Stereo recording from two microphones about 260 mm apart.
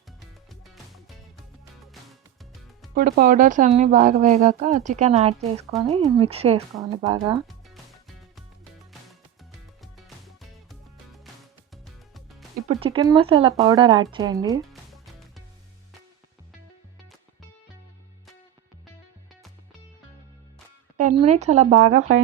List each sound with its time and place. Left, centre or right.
1.9 s music: centre
2.9 s speech: right; by 7.3 s centre
7.4 s music: centre
9.8 s music: centre
12.8 s speech: centre
14.7 s music: centre
21.2 s speech: right